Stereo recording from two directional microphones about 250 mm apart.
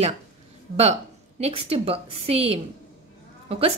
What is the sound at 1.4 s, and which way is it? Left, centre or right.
Speech, right.